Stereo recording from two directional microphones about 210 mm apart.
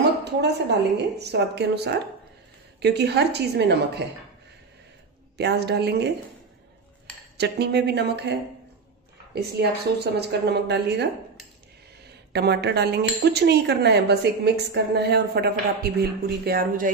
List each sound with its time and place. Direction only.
0.2 s a woman's voice: 55° right (ahead or behind)
5.4 s a woman's voice: 50° right (ahead or behind)
7.3 s a woman's voice: 50° right (ahead or behind)
12.3 s a woman's voice: 50° right (ahead or behind)